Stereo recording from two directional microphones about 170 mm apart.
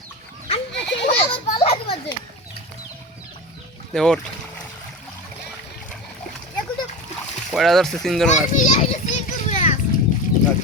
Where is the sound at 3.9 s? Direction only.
5° left (ahead or behind).